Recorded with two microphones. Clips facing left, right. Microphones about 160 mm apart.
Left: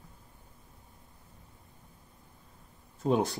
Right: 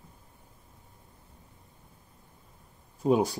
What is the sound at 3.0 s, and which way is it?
Speech, 10° right (ahead or behind).